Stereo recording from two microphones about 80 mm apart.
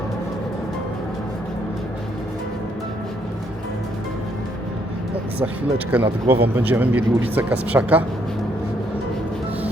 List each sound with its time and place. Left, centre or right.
5.9 s speech: right